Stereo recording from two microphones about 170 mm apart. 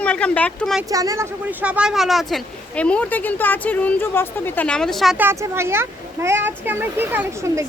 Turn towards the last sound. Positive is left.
turn(degrees=-15)  # may be behind; listen again after turning